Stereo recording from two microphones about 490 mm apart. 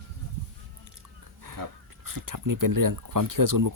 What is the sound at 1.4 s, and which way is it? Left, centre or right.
Speech, right.